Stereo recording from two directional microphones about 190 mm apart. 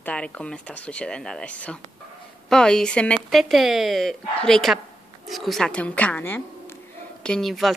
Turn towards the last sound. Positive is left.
turn(degrees=0)  # may be behind; listen again after turning